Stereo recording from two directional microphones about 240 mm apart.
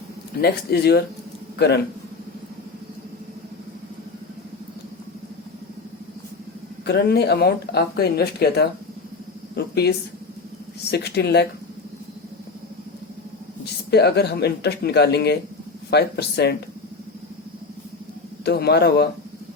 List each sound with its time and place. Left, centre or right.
0.4 s speech: left
6.8 s speech: left
10.9 s speech: left
13.9 s speech: left
18.4 s speech: left